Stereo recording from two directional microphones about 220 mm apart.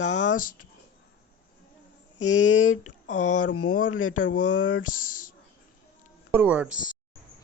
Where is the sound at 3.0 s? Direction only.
35° left (ahead or behind).